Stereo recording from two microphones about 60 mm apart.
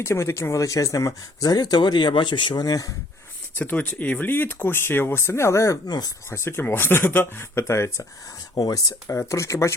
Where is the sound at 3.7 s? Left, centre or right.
Left.